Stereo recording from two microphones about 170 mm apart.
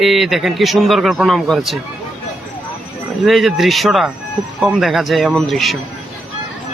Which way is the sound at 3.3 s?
Centre (ahead or behind).